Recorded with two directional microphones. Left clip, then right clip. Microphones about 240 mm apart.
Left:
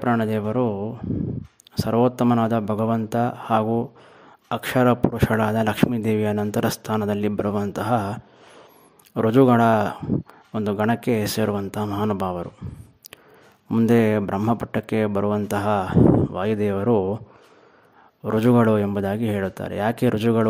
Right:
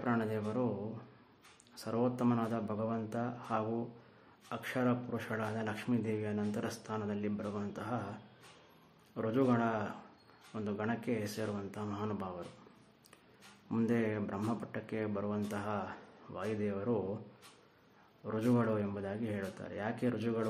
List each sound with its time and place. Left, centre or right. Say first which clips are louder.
0.0 s speech: left 13 dB; left
1.8 s speech: left 15 dB; left
13.7 s speech: left 16 dB; left
18.2 s speech: left 15 dB; left